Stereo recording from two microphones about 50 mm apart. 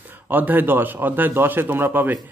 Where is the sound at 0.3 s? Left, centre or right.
Right.